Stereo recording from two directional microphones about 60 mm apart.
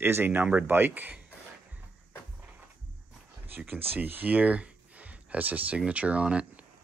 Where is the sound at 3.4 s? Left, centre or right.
Right.